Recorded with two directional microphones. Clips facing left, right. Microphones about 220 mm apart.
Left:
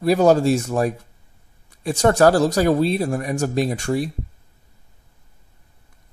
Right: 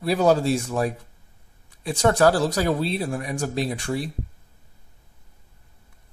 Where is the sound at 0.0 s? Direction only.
45° left (ahead or behind).